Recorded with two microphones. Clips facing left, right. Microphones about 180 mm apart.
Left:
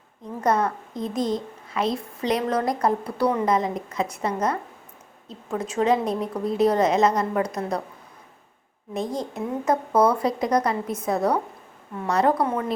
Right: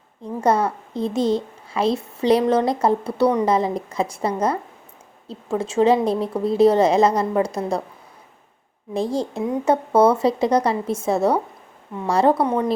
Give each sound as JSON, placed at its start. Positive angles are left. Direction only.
{"t": 0.4, "sound": "a woman's voice", "side_deg": -30}
{"t": 8.9, "sound": "a woman's voice", "side_deg": -30}